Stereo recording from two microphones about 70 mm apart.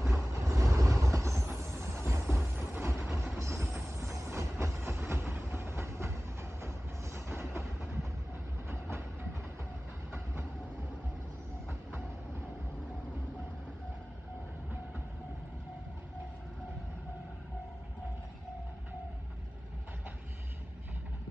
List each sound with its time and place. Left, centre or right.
0.1 s train: right
7.2 s a sound: right
8.6 s train: right